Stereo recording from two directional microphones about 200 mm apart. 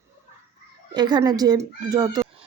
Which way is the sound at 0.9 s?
20° right (ahead or behind).